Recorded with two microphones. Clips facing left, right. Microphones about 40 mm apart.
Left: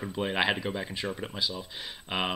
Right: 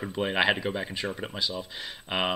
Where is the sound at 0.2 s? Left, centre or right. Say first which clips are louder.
Right 3 dB; centre.